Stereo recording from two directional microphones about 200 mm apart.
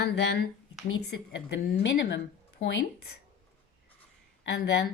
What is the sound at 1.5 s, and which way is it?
A woman's voice, 55° left (ahead or behind).